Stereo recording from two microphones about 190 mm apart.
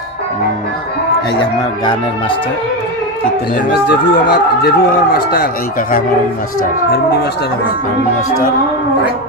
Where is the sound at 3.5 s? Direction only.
50° left (ahead or behind).